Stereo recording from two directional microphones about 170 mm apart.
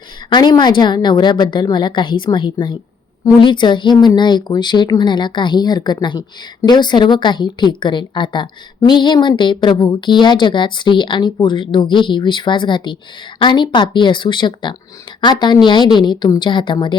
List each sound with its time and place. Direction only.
0.3 s speech: 25° left (ahead or behind)